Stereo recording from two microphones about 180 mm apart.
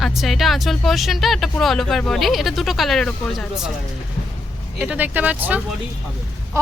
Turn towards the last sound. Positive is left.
turn(degrees=-15)  # may be behind; listen again after turning